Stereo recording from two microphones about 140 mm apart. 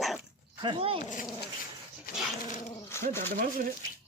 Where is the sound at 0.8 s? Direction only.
40° right (ahead or behind).